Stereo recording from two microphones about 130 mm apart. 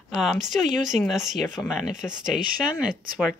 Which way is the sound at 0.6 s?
75° right (ahead or behind).